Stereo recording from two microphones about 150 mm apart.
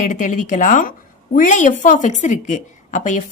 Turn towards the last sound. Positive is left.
turn(degrees=55)  # may be behind; listen again after turning